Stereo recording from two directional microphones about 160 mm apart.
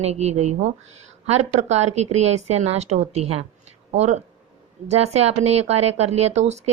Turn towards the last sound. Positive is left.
turn(degrees=-45)  # may be behind; listen again after turning